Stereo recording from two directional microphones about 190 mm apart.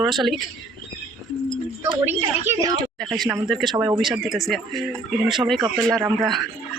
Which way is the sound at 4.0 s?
Centre (ahead or behind).